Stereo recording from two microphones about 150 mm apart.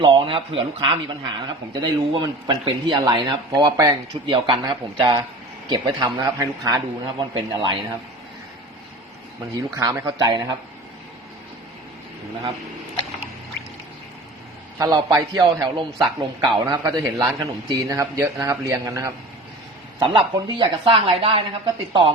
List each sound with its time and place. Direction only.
0.0 s a man's voice: 30° right (ahead or behind)
9.7 s a man's voice: 20° right (ahead or behind)
14.8 s a man's voice: 25° right (ahead or behind)
20.0 s speech: 30° right (ahead or behind)